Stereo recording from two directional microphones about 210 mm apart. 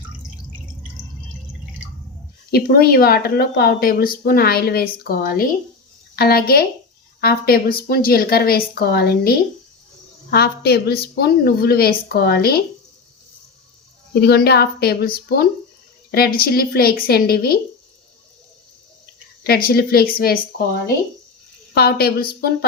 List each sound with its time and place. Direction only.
2.5 s speech: 45° left (ahead or behind)
14.2 s speech: 50° left (ahead or behind)
19.4 s speech: 45° left (ahead or behind)
21.8 s speech: 50° left (ahead or behind)